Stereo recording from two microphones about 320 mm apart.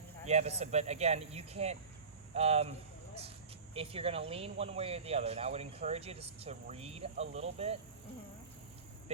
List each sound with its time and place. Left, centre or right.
0.3 s speech: centre
3.8 s speech: centre